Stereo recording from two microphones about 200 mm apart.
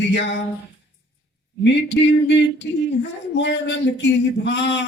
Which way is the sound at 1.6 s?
60° left (ahead or behind).